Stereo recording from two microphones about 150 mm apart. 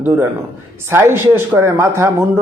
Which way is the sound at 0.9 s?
15° right (ahead or behind).